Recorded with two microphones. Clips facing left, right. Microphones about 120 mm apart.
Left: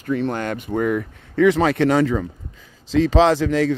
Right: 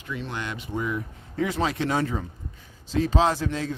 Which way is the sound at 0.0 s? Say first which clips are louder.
Left 10 dB; 50° left (ahead or behind).